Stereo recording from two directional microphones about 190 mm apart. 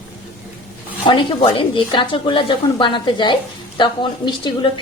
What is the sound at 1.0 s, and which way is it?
A woman's voice, 25° left (ahead or behind).